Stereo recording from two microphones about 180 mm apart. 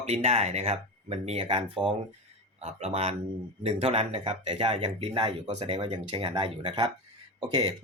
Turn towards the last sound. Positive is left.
turn(degrees=-25)  # may be behind; listen again after turning